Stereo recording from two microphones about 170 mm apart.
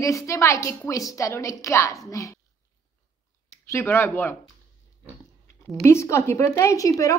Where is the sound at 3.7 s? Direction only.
15° left (ahead or behind).